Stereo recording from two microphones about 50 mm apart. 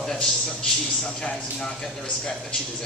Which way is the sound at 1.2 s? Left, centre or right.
Centre.